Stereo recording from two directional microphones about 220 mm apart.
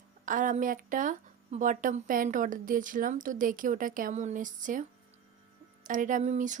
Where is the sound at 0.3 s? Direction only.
35° right (ahead or behind).